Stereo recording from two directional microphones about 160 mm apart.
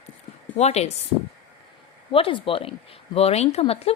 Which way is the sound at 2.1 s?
35° left (ahead or behind).